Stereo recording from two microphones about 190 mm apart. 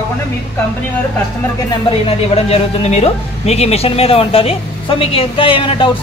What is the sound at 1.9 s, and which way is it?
Speech, 30° left (ahead or behind).